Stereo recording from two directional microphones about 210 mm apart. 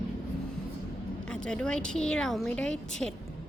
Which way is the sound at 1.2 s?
5° left (ahead or behind).